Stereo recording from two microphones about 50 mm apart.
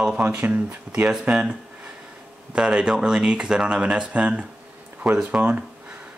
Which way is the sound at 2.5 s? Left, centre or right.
Centre.